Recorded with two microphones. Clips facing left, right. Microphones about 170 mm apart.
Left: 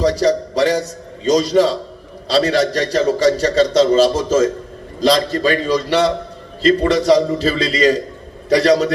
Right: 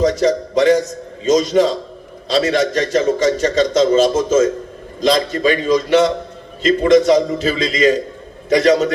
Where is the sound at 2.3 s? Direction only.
35° left (ahead or behind).